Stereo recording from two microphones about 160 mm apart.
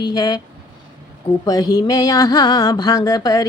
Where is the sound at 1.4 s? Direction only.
25° left (ahead or behind).